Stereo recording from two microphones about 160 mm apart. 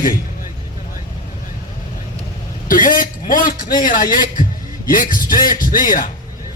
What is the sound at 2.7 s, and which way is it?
A man's voice, 60° left (ahead or behind).